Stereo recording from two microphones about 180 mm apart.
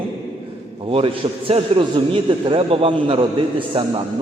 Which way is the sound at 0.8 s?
30° right (ahead or behind).